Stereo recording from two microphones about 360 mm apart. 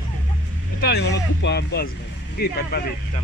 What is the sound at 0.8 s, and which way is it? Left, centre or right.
Speech, left.